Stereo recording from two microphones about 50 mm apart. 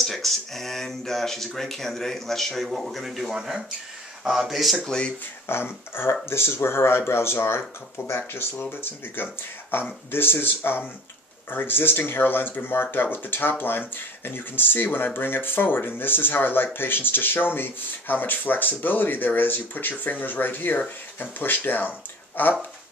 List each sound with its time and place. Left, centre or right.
0.0 s speech: centre
4.8 s speech: centre
5.5 s speech: left
8.2 s speech: left